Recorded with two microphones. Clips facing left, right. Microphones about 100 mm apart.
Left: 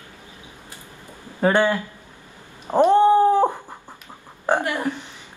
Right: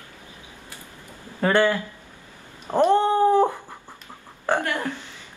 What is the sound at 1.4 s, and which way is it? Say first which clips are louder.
Speech: left 1 dB; 20° left (ahead or behind).